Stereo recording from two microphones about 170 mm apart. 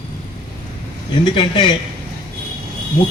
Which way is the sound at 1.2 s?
25° left (ahead or behind).